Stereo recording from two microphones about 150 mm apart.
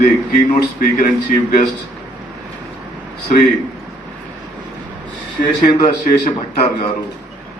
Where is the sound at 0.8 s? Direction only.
70° left (ahead or behind).